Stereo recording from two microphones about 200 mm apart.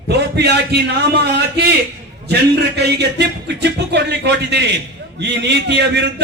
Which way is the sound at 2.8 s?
55° right (ahead or behind).